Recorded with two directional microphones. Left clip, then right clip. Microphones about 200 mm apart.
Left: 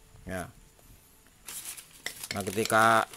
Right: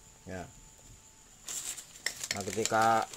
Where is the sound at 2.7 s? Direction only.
30° left (ahead or behind).